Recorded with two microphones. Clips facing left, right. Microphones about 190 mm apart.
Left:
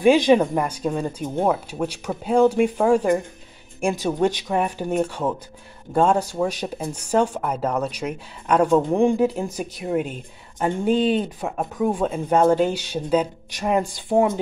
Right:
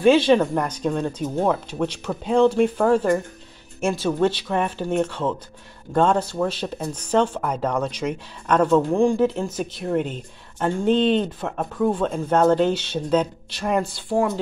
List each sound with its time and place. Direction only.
0.0 s speech: 15° left (ahead or behind)